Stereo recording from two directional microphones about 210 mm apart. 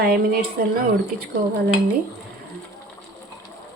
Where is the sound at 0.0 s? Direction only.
45° right (ahead or behind).